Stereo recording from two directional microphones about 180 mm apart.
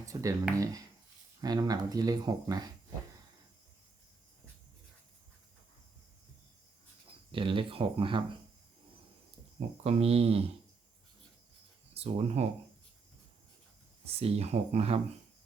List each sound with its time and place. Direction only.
0.0 s speech: 20° right (ahead or behind)
7.3 s speech: 30° right (ahead or behind)
9.6 s speech: 35° right (ahead or behind)
11.9 s speech: 35° right (ahead or behind)
14.0 s speech: 35° right (ahead or behind)